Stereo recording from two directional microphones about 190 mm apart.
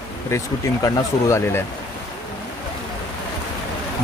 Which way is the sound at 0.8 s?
15° left (ahead or behind).